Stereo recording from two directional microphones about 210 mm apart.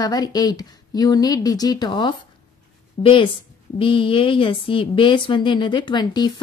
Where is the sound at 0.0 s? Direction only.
20° left (ahead or behind).